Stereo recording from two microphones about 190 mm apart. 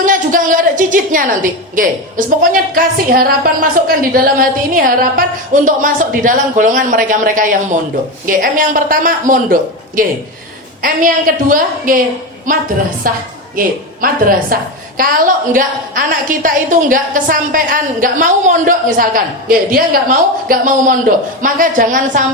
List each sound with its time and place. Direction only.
0.0 s a woman's voice: 45° right (ahead or behind)